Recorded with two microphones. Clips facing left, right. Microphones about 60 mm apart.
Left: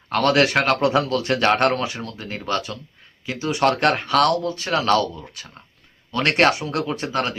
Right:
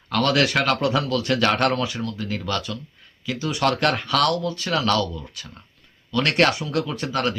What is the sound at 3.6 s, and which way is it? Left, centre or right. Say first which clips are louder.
Speech: left 3 dB; left.